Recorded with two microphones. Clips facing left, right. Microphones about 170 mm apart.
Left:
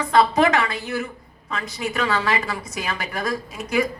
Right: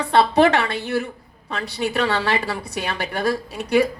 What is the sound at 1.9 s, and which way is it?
A woman's voice, 35° right (ahead or behind).